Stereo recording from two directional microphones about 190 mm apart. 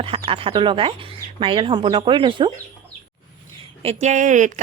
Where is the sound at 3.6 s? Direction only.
35° right (ahead or behind).